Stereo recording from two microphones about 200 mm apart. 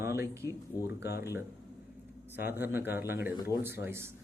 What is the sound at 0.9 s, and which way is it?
Speech, 55° left (ahead or behind).